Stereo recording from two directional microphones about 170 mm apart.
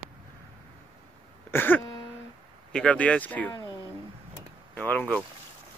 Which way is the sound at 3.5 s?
20° left (ahead or behind).